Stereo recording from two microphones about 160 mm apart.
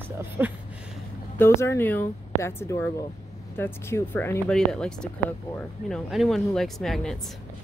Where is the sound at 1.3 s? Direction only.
15° left (ahead or behind).